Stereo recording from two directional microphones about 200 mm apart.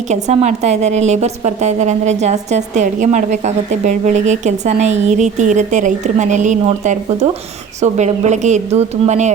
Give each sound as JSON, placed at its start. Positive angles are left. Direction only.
{"t": 0.1, "sound": "a woman's voice", "side_deg": -35}